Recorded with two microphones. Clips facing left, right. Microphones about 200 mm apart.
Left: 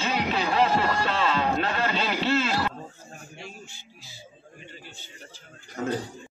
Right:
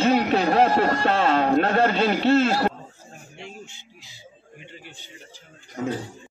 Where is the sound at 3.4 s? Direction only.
20° right (ahead or behind).